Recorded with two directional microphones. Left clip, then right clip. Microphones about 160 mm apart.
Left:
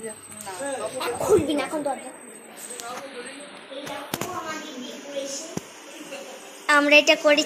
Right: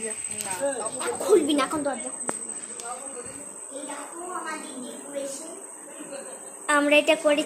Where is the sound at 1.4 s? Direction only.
90° right.